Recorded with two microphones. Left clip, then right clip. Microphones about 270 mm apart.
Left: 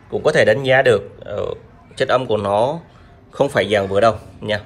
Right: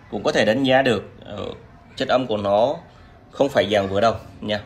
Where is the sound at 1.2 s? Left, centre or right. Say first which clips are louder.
Left 8 dB; left.